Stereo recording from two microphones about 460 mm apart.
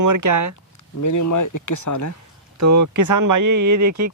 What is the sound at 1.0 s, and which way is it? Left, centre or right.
Speech, left.